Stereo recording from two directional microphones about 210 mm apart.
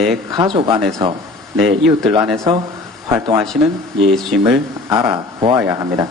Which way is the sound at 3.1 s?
15° right (ahead or behind).